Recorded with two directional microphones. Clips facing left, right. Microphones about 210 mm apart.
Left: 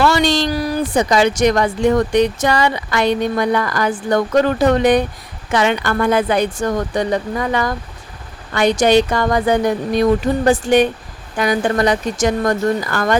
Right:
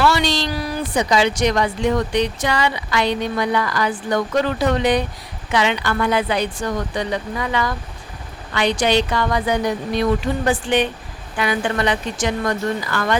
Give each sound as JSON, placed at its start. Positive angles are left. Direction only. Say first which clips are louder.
{"t": 0.0, "sound": "speech", "louder": "left 4 dB", "side_deg": 45}